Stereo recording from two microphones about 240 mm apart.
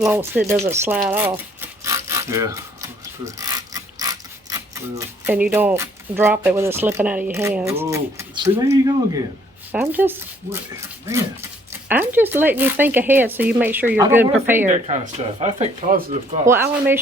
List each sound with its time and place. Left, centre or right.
0.0 s speech: centre
11.9 s speech: centre
14.7 s speech: right
16.5 s speech: centre